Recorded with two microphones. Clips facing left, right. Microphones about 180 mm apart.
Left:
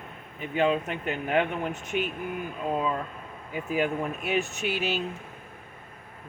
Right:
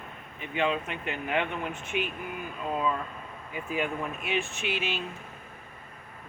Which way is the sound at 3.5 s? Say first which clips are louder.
Left 4 dB; 40° left (ahead or behind).